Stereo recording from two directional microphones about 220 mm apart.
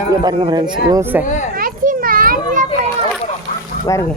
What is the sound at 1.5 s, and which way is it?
Children playing, 40° right (ahead or behind).